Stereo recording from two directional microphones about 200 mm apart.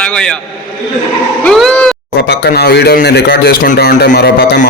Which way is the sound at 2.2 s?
50° left (ahead or behind).